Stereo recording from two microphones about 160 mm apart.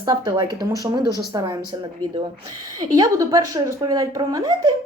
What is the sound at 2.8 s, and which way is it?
A woman's voice, 20° right (ahead or behind).